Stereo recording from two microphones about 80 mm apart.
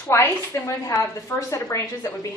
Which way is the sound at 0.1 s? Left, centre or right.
Left.